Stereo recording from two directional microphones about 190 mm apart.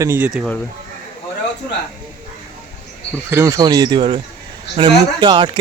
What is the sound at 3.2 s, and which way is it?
Speech, 15° right (ahead or behind).